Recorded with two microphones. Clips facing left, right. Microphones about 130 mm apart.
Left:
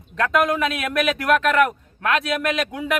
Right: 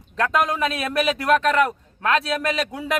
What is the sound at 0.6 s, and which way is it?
A man's voice, 30° right (ahead or behind).